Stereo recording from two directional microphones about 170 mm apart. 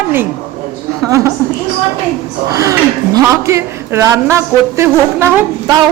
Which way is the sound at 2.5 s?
20° right (ahead or behind).